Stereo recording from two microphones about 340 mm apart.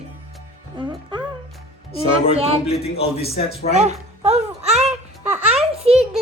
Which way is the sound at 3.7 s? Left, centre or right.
Centre.